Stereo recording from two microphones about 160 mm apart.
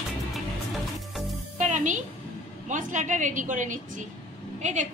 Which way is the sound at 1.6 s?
50° right (ahead or behind).